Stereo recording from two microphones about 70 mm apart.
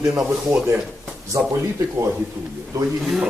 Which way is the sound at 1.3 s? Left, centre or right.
Right.